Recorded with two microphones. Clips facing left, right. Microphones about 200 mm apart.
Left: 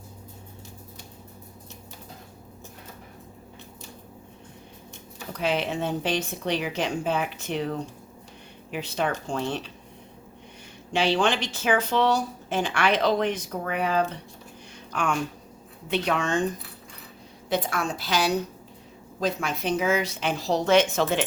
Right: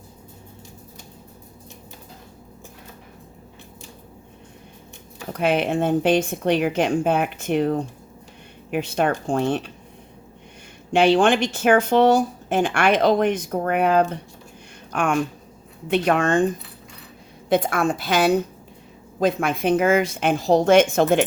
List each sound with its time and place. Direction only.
5.3 s speech: 55° right (ahead or behind)
10.9 s speech: 55° right (ahead or behind)
17.5 s speech: 55° right (ahead or behind)